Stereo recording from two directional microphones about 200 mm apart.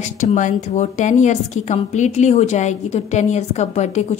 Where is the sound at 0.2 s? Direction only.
40° left (ahead or behind).